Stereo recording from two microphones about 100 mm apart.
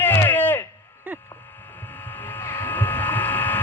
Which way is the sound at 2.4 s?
20° left (ahead or behind).